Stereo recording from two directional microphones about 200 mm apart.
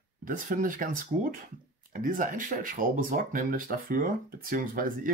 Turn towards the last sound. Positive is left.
turn(degrees=-45)  # may be behind; listen again after turning